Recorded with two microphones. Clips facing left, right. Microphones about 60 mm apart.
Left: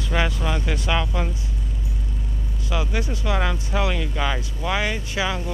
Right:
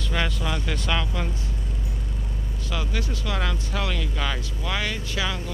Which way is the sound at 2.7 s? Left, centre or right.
Centre.